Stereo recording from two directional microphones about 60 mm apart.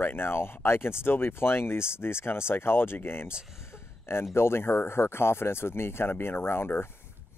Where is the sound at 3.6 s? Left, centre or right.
Left.